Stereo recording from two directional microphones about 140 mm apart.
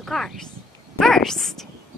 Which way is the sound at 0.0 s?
5° left (ahead or behind).